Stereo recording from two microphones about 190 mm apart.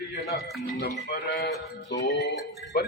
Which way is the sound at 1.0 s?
55° left (ahead or behind).